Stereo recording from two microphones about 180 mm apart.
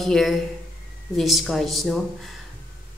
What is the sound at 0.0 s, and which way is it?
A woman's voice, centre (ahead or behind).